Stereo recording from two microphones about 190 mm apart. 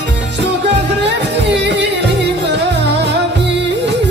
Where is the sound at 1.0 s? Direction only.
65° right (ahead or behind).